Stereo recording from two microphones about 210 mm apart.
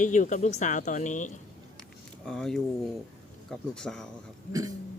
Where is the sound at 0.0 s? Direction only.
35° left (ahead or behind).